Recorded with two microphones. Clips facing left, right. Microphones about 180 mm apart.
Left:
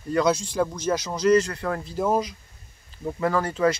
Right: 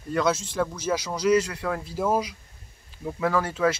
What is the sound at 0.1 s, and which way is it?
Speech, 5° right (ahead or behind).